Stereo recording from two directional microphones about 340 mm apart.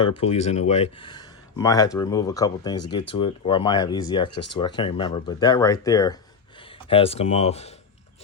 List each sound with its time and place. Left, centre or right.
0.2 s speech: centre